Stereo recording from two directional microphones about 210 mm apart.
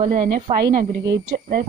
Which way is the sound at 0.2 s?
25° right (ahead or behind).